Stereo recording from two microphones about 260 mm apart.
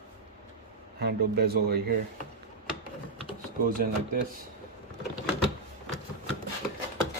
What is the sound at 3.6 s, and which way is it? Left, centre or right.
Speech, right.